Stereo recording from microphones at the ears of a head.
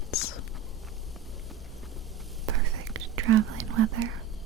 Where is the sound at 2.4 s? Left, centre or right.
Right.